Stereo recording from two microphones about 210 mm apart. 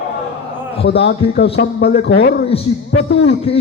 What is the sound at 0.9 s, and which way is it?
A man's voice, 50° left (ahead or behind).